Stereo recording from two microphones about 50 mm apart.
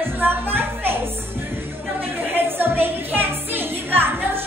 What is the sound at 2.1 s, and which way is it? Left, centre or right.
Music, right.